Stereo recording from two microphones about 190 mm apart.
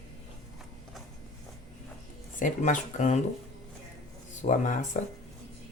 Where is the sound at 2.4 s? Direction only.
45° left (ahead or behind).